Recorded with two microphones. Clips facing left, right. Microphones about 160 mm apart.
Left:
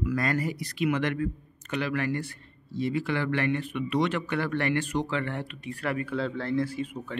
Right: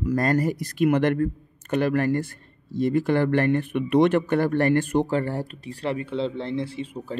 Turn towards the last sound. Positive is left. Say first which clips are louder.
# right 2 dB
turn(degrees=-30)  # may be behind; listen again after turning